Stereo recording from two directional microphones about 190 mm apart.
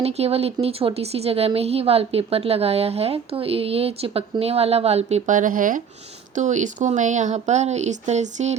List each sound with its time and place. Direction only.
0.0 s speech: 30° right (ahead or behind)